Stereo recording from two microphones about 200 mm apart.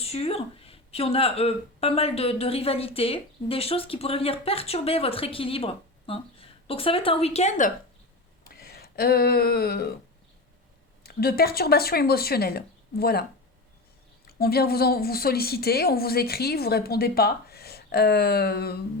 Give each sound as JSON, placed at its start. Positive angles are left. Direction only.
{"t": 0.0, "sound": "speech", "side_deg": 30}
{"t": 8.4, "sound": "a sound", "side_deg": 50}
{"t": 11.0, "sound": "a woman's voice", "side_deg": 50}
{"t": 14.3, "sound": "a woman's voice", "side_deg": 50}